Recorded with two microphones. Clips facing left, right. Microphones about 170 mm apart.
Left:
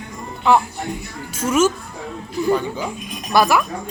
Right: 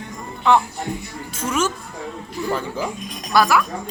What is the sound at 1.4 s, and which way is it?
Speech, 10° left (ahead or behind).